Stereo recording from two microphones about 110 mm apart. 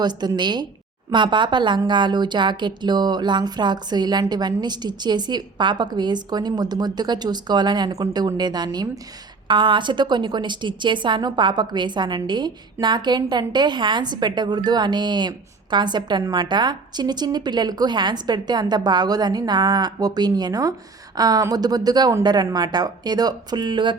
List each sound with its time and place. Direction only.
0.0 s a woman's voice: 40° right (ahead or behind)